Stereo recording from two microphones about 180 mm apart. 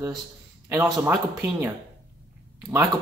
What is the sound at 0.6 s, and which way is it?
Speech, 10° right (ahead or behind).